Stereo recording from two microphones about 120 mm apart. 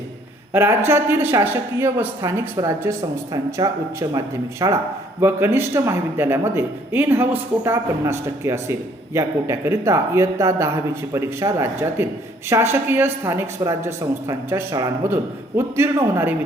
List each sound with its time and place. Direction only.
0.5 s speech: 20° right (ahead or behind)
3.6 s speech: 35° right (ahead or behind)
5.2 s speech: 20° right (ahead or behind)